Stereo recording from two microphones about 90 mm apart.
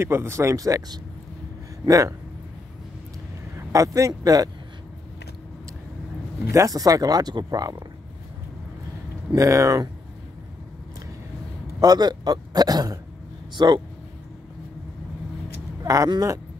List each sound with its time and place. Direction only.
0.0 s speech: 30° right (ahead or behind)
3.5 s speech: 35° right (ahead or behind)
6.5 s speech: 40° right (ahead or behind)
9.3 s speech: 35° right (ahead or behind)
11.8 s speech: 50° right (ahead or behind)
13.6 s speech: 55° right (ahead or behind)
15.8 s speech: 40° right (ahead or behind)